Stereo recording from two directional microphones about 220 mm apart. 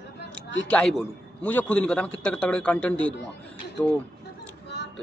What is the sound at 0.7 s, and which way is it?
A man's voice, 5° left (ahead or behind).